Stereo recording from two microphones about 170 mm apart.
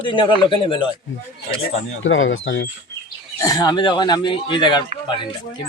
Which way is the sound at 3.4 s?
20° left (ahead or behind).